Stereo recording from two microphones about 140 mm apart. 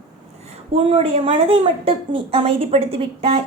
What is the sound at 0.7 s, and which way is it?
A woman's voice, 45° right (ahead or behind).